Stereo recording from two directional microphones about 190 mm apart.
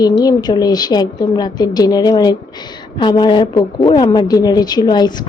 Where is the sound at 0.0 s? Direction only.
20° left (ahead or behind).